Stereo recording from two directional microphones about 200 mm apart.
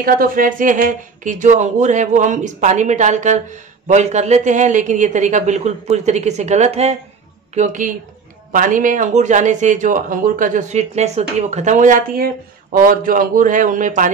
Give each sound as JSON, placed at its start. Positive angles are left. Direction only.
{"t": 0.0, "sound": "speech", "side_deg": -45}